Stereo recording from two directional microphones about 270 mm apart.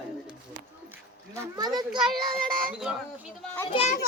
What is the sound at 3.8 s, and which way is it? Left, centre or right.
Speech, left.